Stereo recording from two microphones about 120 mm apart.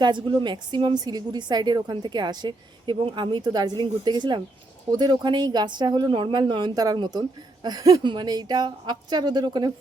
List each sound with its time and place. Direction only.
0.0 s speech: 40° right (ahead or behind)